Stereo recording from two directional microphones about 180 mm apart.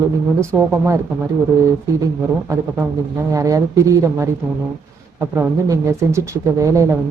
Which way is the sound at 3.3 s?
20° right (ahead or behind).